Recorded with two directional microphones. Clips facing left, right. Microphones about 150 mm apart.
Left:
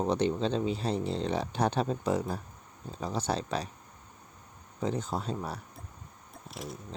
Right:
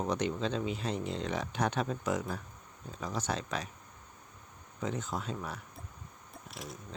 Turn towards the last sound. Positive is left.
turn(degrees=0)  # may be behind; listen again after turning